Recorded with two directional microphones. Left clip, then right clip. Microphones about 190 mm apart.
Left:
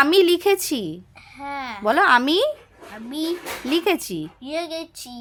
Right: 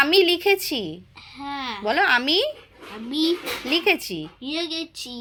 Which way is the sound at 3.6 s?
40° left (ahead or behind).